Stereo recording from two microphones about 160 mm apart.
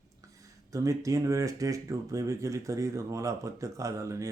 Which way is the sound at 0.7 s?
20° right (ahead or behind).